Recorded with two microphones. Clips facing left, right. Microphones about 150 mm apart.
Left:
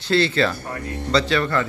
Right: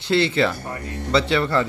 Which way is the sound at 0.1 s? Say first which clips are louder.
Even; 20° right (ahead or behind).